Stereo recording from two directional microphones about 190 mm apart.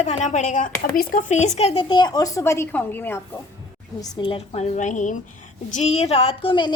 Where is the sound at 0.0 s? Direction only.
35° left (ahead or behind); by 3.2 s 10° left (ahead or behind).